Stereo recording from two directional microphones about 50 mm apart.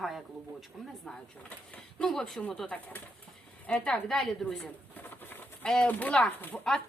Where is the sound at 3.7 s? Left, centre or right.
Left.